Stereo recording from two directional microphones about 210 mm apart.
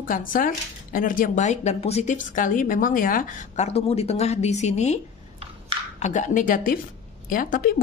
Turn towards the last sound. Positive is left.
turn(degrees=40)  # may be behind; listen again after turning